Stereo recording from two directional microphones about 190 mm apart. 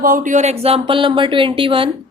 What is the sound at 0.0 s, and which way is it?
A woman's voice, 45° right (ahead or behind).